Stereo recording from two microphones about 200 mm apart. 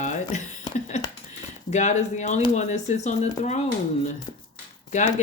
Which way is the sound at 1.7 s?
35° left (ahead or behind).